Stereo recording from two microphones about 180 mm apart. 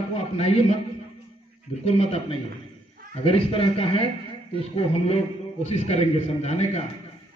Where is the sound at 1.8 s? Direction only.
35° left (ahead or behind).